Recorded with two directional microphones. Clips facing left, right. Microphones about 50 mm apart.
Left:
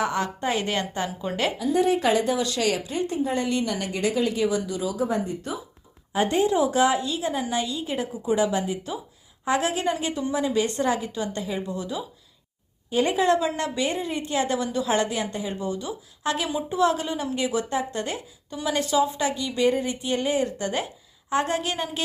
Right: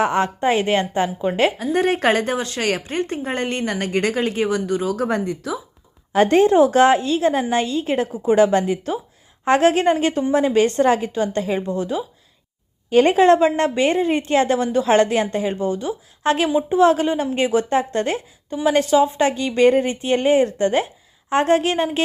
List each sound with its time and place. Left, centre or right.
0.0 s speech: right
1.5 s speech: right
6.1 s speech: right
12.9 s speech: right